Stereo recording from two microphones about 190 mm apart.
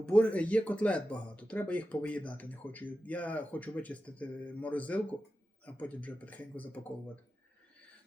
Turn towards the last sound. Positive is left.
turn(degrees=10)  # may be behind; listen again after turning